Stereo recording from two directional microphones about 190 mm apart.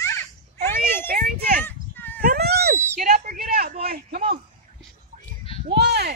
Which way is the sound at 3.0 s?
45° right (ahead or behind).